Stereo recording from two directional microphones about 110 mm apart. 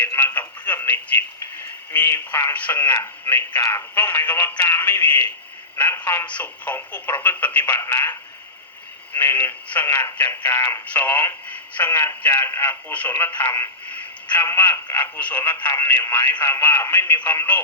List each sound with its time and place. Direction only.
0.0 s telephone: 20° left (ahead or behind)
1.9 s speech: 20° left (ahead or behind)
9.1 s speech: 20° left (ahead or behind)